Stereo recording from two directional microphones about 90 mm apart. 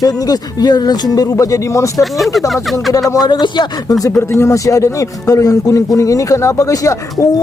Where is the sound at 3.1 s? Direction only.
50° left (ahead or behind).